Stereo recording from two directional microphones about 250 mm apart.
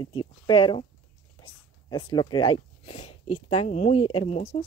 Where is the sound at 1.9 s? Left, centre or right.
Centre.